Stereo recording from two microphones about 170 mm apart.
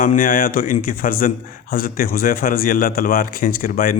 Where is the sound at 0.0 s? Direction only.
50° left (ahead or behind).